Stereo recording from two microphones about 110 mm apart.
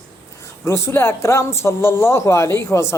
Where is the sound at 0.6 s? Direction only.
25° left (ahead or behind).